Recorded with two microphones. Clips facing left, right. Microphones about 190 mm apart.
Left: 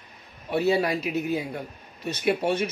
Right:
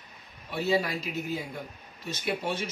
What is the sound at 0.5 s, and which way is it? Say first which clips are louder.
Speech: left 5 dB; 65° left (ahead or behind).